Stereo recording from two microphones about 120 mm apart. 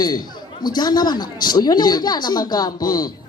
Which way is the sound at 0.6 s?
35° left (ahead or behind).